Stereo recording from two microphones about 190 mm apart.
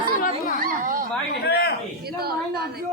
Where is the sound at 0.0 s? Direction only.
50° left (ahead or behind).